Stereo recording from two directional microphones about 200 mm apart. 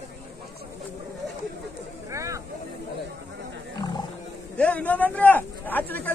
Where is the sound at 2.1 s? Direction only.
15° right (ahead or behind).